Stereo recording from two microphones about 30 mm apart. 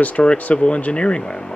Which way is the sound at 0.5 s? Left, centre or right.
Left.